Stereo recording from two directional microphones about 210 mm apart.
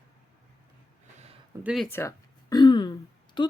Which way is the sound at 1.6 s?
Centre (ahead or behind).